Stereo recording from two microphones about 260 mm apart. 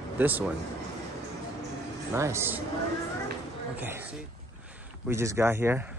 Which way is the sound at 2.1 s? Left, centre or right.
Centre.